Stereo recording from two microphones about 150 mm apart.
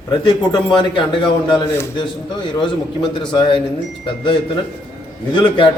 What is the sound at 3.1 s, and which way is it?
Speech, 35° left (ahead or behind).